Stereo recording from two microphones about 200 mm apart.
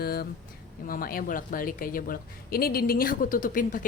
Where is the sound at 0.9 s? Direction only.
45° left (ahead or behind).